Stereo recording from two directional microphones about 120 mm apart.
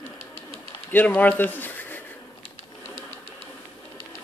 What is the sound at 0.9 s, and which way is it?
Speech, 15° left (ahead or behind).